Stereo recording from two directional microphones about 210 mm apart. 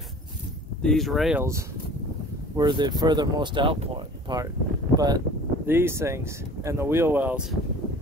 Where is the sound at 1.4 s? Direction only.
15° right (ahead or behind).